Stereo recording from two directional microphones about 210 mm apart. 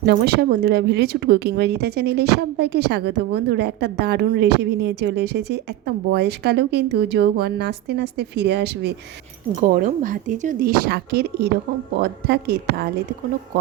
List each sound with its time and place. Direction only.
0.0 s speech: 45° right (ahead or behind)
9.6 s speech: 40° right (ahead or behind)